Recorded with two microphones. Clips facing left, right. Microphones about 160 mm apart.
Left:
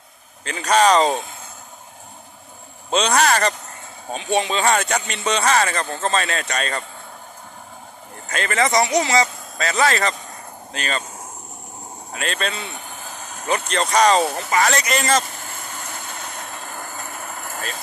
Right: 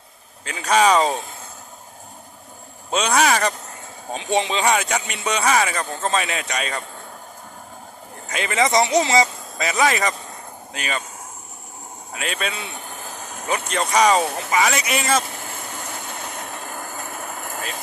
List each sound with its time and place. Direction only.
0.4 s speech: 10° right (ahead or behind)
2.9 s speech: 5° right (ahead or behind)
4.1 s speech: 20° right (ahead or behind)
8.3 s speech: 15° right (ahead or behind)
12.1 s speech: 10° right (ahead or behind)
17.4 s vehicle: 15° right (ahead or behind)